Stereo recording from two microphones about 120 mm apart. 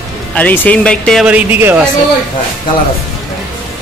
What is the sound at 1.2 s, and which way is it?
Speech, 10° right (ahead or behind).